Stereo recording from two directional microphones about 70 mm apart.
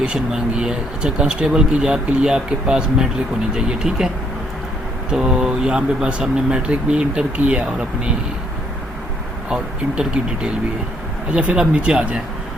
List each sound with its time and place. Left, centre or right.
0.0 s speech: centre
5.1 s speech: centre
9.5 s speech: centre